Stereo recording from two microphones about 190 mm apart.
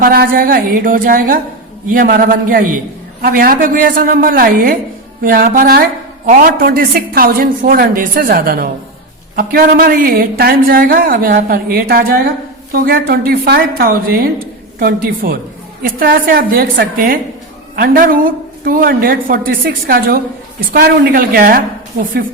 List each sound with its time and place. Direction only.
0.0 s a woman's voice: 55° right (ahead or behind)